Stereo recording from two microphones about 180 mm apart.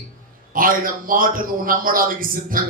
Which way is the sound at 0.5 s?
50° right (ahead or behind).